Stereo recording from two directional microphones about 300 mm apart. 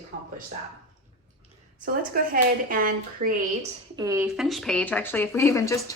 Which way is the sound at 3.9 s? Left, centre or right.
Centre.